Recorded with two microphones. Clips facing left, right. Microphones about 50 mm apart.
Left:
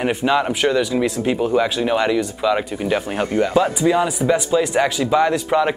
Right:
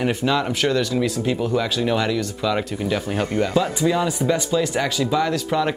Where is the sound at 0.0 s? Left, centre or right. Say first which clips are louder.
Left 3 dB; centre.